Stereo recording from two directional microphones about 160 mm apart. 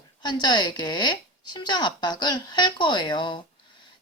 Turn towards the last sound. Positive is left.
turn(degrees=30)  # may be behind; listen again after turning